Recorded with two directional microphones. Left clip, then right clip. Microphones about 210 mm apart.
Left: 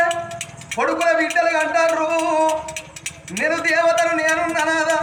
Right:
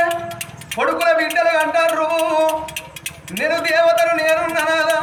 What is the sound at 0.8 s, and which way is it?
Music, 10° right (ahead or behind).